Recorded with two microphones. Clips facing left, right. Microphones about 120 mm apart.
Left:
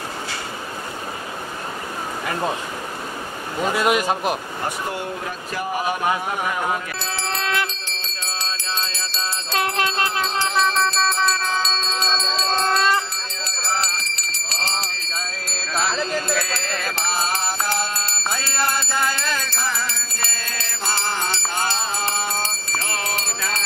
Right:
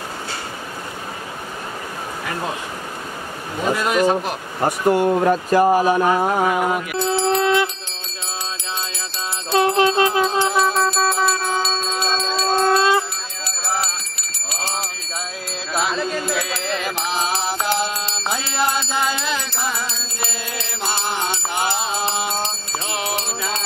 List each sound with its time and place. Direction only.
3.8 s speech: 15° left (ahead or behind)
4.6 s speech: 45° right (ahead or behind)
6.5 s mantra: 15° right (ahead or behind)
8.2 s music: 15° right (ahead or behind)